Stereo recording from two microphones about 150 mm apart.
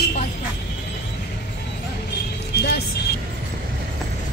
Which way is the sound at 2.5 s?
90° left.